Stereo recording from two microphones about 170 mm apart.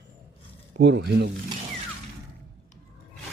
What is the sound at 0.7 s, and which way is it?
Speech, 90° right.